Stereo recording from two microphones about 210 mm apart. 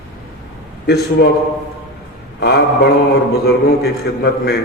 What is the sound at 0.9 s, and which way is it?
Speech, 50° left (ahead or behind).